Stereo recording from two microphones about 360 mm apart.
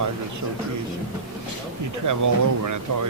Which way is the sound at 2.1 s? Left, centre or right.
Right.